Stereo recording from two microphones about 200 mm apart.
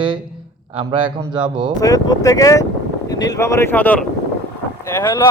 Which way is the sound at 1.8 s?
15° left (ahead or behind).